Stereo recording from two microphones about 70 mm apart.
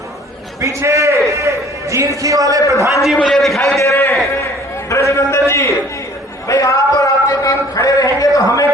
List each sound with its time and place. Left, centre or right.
0.6 s a sound: right
1.3 s a man's voice: right
3.2 s a man's voice: centre
3.8 s a man's voice: left
4.9 s a sound: left
6.5 s a man's voice: left